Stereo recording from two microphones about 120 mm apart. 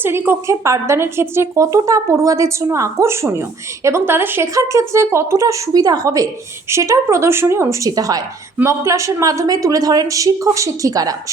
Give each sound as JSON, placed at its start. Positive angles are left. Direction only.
{"t": 0.0, "sound": "a woman's voice", "side_deg": -20}